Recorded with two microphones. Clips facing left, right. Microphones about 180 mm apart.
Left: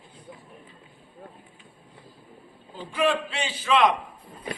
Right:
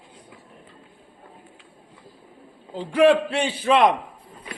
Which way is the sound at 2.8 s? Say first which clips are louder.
Right 8 dB; 65° right (ahead or behind).